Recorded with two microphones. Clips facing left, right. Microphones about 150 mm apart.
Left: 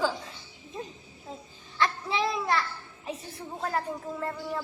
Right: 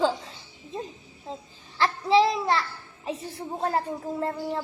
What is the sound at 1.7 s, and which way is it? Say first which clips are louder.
Babbling: right 8 dB; 30° right (ahead or behind).